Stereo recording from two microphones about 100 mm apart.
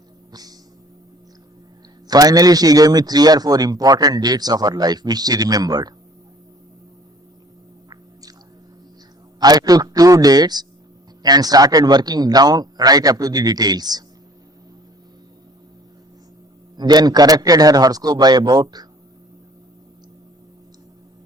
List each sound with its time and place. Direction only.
2.0 s a man's voice: 40° right (ahead or behind)
9.4 s a man's voice: 40° right (ahead or behind)
16.7 s a man's voice: 45° right (ahead or behind)